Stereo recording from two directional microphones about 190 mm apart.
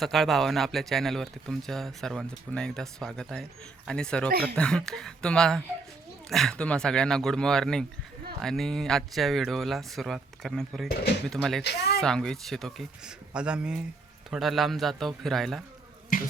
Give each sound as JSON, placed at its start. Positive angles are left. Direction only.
{"t": 0.0, "sound": "speech", "side_deg": 0}
{"t": 4.3, "sound": "speech", "side_deg": -55}
{"t": 4.5, "sound": "speech", "side_deg": 5}
{"t": 16.1, "sound": "water", "side_deg": 45}